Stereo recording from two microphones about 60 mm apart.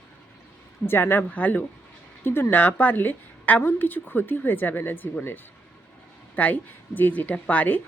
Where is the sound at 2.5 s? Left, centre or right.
Left.